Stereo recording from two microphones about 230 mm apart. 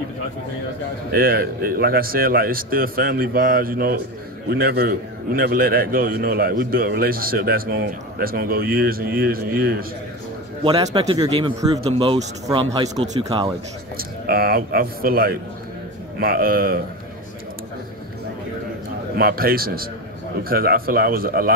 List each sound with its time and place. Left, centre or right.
1.1 s a man's voice: right
10.6 s speech: centre
13.9 s a man's voice: right
19.1 s a man's voice: right